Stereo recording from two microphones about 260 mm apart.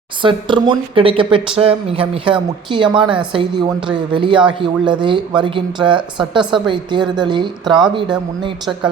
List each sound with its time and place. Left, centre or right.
0.2 s a woman's voice: centre